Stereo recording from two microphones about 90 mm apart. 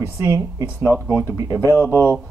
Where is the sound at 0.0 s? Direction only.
30° right (ahead or behind).